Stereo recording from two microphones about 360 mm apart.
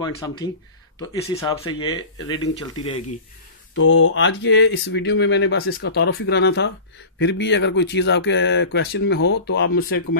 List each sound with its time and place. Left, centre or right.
0.0 s speech: centre
3.7 s speech: left